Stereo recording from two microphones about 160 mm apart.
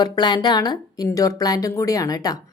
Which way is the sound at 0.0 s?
25° left (ahead or behind).